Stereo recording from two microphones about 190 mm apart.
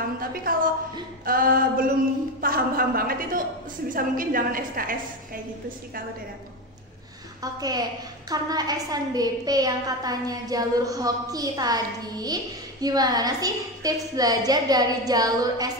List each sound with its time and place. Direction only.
0.2 s a woman's voice: 50° right (ahead or behind)
8.3 s a woman's voice: 20° right (ahead or behind)